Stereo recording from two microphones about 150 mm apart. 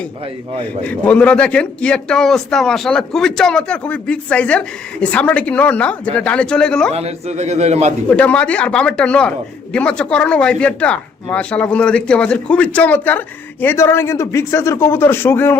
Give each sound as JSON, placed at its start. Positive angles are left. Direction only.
{"t": 0.6, "sound": "a man's voice", "side_deg": 10}
{"t": 6.9, "sound": "a man's voice", "side_deg": -45}
{"t": 8.1, "sound": "a man's voice", "side_deg": 10}